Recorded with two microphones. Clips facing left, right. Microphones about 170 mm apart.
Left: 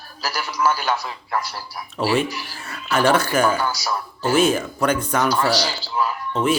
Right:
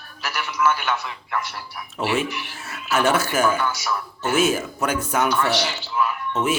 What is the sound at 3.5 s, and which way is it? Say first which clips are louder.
Speech: left 1 dB; 35° left (ahead or behind).